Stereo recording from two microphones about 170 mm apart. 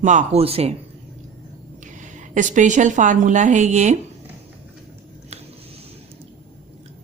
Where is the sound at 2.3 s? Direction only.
45° right (ahead or behind).